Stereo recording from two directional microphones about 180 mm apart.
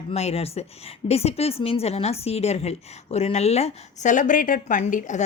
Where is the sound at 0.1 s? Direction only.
35° left (ahead or behind).